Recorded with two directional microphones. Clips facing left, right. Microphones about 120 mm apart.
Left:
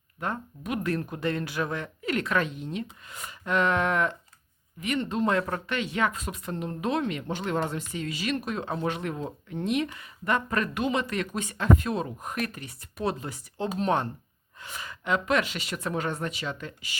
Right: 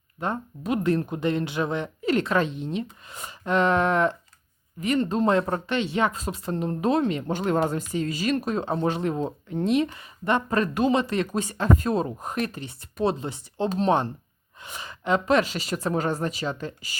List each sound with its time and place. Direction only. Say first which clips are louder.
0.2 s speech: right 3 dB; 25° right (ahead or behind)